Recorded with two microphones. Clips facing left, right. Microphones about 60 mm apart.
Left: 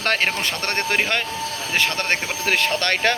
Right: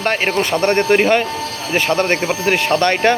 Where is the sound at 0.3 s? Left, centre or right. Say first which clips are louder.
Right 9 dB; right.